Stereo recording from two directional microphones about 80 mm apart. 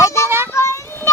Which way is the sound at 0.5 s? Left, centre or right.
Left.